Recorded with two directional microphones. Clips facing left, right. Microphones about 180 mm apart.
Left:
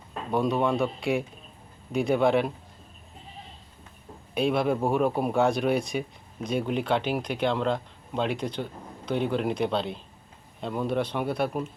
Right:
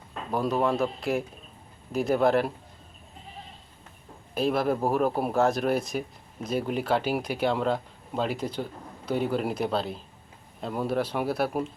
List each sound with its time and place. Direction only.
0.3 s speech: centre (ahead or behind)
4.4 s speech: centre (ahead or behind)